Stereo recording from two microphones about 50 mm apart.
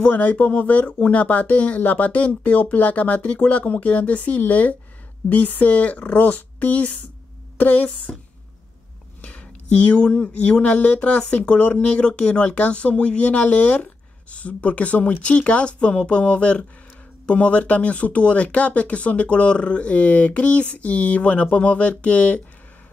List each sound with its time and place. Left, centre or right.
0.0 s speech: left
9.2 s speech: left